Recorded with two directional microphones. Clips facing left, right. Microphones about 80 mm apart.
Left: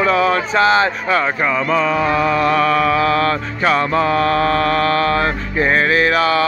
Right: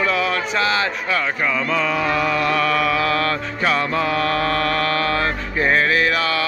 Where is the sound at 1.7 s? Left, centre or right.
Left.